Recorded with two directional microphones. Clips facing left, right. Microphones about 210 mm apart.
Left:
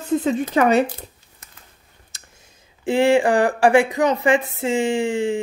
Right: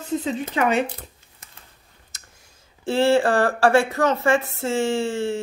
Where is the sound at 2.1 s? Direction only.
30° left (ahead or behind).